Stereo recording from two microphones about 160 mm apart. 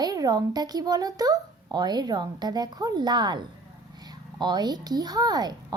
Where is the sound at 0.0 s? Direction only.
25° right (ahead or behind).